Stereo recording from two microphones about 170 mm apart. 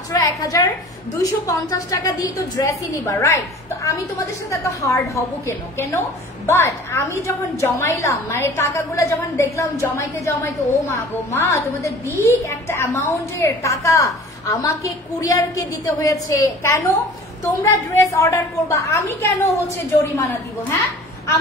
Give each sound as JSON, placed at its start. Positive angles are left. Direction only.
{"t": 0.1, "sound": "a woman's voice", "side_deg": 20}
{"t": 4.5, "sound": "a woman's voice", "side_deg": 20}